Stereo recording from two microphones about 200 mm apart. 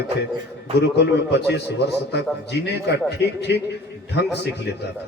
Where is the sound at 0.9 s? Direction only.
55° left (ahead or behind).